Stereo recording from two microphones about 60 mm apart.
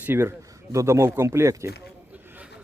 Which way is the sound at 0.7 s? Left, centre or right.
Right.